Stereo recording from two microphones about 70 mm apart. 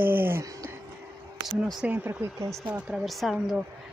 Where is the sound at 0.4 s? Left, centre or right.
Right.